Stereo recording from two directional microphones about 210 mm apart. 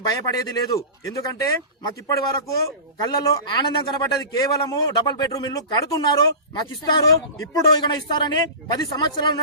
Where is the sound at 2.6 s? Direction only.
20° left (ahead or behind).